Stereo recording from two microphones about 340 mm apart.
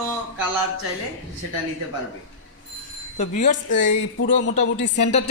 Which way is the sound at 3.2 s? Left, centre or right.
Left.